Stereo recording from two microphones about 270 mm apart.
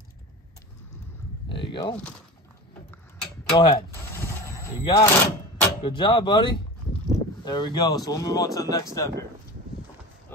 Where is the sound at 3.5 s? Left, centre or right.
Centre.